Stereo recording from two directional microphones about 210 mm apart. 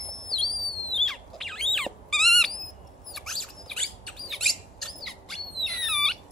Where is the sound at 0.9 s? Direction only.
Centre (ahead or behind).